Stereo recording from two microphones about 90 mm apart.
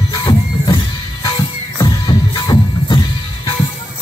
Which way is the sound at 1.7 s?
45° left (ahead or behind).